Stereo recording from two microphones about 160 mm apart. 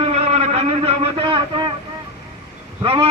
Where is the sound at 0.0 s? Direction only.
40° right (ahead or behind).